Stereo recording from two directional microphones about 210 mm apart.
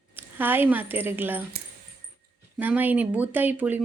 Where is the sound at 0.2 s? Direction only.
10° right (ahead or behind).